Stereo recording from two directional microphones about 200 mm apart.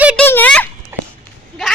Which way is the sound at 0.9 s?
10° right (ahead or behind).